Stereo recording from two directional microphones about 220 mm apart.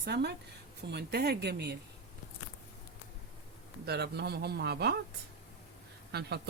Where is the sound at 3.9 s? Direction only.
50° right (ahead or behind).